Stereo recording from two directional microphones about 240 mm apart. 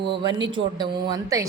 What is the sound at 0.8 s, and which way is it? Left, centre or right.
Speech, centre.